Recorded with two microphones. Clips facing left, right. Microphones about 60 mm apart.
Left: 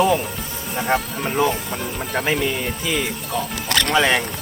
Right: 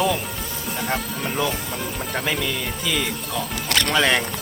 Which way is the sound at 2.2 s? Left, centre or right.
Left.